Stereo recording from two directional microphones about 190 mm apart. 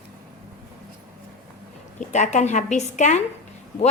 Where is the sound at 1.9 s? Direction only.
40° left (ahead or behind).